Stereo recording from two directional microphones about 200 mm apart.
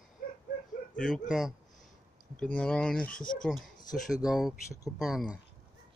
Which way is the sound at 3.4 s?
Centre (ahead or behind).